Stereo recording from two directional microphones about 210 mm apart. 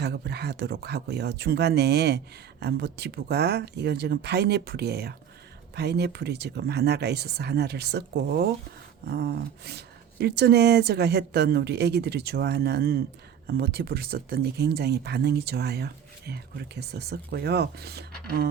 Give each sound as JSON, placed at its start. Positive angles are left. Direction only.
{"t": 0.0, "sound": "speech", "side_deg": -50}